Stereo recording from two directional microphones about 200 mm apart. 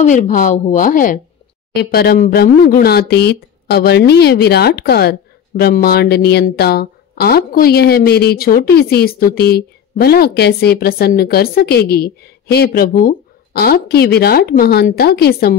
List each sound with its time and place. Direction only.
0.0 s a woman's voice: 40° left (ahead or behind)
1.7 s speech: 50° left (ahead or behind)